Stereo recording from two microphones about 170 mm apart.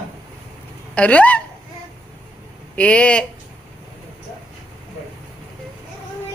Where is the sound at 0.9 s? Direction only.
10° left (ahead or behind).